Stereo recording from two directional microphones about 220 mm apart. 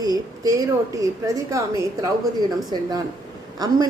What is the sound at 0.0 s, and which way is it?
A woman's voice, 15° right (ahead or behind).